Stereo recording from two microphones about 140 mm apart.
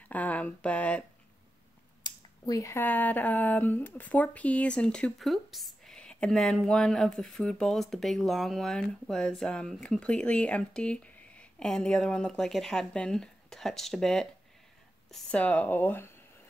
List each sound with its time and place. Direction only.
0.1 s speech: 10° left (ahead or behind)
2.0 s speech: 25° left (ahead or behind)